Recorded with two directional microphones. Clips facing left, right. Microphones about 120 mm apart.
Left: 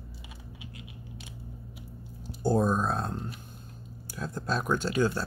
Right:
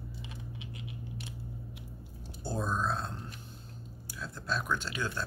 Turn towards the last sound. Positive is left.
turn(degrees=40)  # may be behind; listen again after turning